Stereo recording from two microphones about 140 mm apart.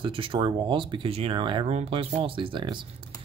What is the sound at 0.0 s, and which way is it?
Speech, 40° right (ahead or behind).